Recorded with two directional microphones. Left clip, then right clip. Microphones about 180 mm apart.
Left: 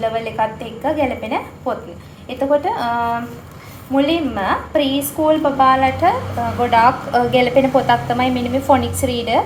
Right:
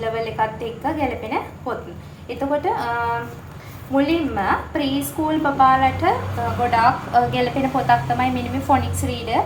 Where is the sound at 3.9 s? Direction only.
35° left (ahead or behind).